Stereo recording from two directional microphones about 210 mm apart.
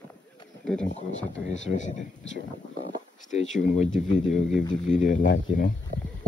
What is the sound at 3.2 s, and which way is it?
Speech, 35° left (ahead or behind).